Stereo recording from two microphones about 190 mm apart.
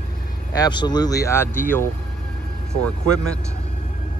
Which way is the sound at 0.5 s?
20° left (ahead or behind).